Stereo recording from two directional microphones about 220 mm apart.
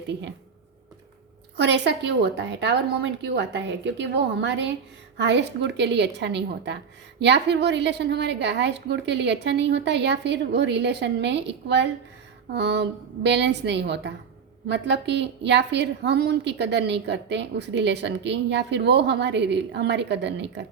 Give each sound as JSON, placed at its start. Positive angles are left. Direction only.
{"t": 1.5, "sound": "a woman's voice", "side_deg": -50}